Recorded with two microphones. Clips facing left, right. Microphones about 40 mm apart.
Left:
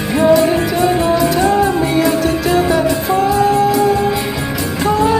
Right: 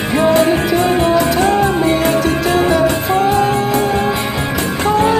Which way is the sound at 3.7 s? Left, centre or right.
Right.